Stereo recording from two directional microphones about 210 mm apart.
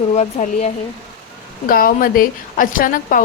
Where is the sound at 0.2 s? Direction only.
35° left (ahead or behind).